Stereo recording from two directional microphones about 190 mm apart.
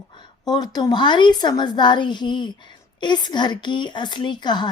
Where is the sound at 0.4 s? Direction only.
20° left (ahead or behind).